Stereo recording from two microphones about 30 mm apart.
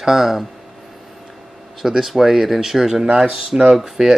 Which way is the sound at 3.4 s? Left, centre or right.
Centre.